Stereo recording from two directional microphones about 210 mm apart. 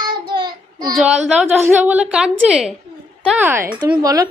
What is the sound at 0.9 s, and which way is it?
A woman's voice, centre (ahead or behind).